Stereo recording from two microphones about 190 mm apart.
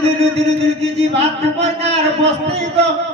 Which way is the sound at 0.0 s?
30° right (ahead or behind).